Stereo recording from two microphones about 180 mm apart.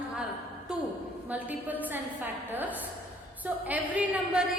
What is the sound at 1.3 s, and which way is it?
A woman's voice, 10° right (ahead or behind).